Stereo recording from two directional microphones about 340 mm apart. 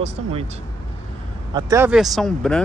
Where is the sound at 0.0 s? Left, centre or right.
Centre.